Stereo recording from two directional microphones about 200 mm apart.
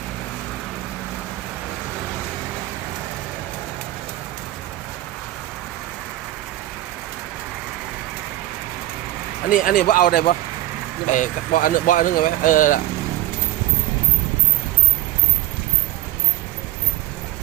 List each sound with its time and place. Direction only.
9.5 s speech: 40° left (ahead or behind)